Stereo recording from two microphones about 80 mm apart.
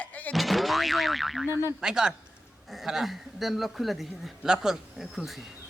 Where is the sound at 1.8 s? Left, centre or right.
Centre.